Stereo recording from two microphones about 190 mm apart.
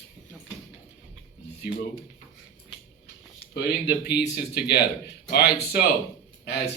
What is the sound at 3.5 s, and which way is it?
A man's voice, 55° left (ahead or behind).